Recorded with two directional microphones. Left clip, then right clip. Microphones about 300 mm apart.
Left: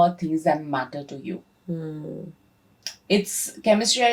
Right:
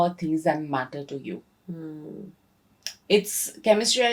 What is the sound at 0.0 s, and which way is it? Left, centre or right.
Speech, right.